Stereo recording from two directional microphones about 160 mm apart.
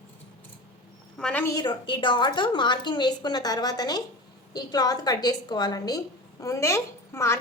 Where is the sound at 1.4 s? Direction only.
25° left (ahead or behind).